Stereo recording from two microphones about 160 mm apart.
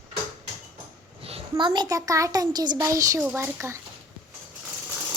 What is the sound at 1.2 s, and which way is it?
A child's voice, 35° right (ahead or behind).